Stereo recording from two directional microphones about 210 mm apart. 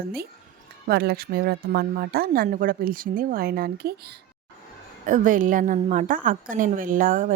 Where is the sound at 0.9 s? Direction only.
50° right (ahead or behind).